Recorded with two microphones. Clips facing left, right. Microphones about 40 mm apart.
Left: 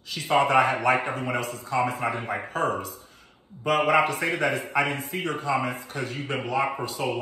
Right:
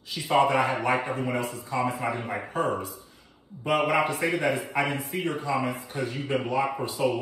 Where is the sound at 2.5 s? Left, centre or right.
Left.